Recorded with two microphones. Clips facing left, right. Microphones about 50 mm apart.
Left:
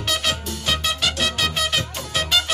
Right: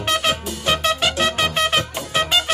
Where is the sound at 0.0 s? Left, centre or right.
Right.